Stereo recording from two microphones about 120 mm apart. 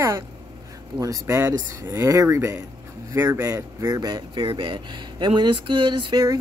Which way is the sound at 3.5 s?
30° right (ahead or behind).